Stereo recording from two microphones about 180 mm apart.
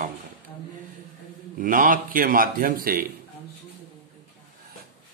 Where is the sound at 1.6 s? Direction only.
50° right (ahead or behind).